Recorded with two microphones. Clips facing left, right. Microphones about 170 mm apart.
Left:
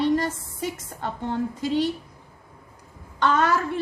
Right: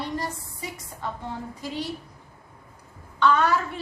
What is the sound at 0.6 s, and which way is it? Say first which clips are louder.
A woman's voice: left 5 dB; 70° left (ahead or behind).